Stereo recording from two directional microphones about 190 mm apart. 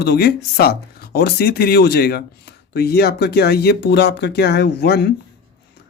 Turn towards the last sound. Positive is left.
turn(degrees=60)  # may be behind; listen again after turning